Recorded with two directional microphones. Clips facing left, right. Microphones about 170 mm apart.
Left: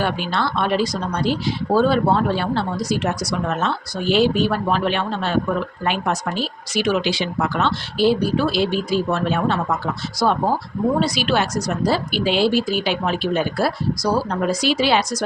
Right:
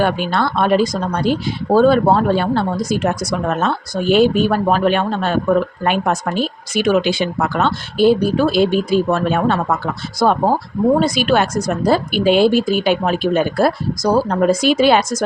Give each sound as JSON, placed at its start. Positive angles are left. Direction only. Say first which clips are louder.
{"t": 0.0, "sound": "speech", "louder": "right 5 dB", "side_deg": -50}